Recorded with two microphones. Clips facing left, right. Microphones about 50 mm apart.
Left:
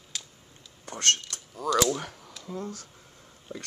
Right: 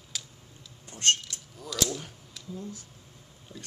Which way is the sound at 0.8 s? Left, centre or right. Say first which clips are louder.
Even; left.